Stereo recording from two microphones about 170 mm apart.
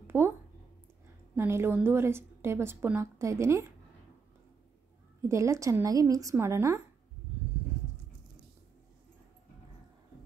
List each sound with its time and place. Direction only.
0.0 s a sound: 15° right (ahead or behind)
1.3 s a woman's voice: 10° right (ahead or behind)
5.3 s a woman's voice: 15° right (ahead or behind)